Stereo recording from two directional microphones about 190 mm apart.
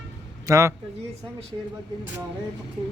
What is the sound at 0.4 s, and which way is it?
Speech, 15° right (ahead or behind).